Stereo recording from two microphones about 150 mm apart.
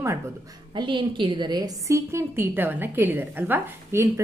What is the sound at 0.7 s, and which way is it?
A woman's voice, 30° right (ahead or behind).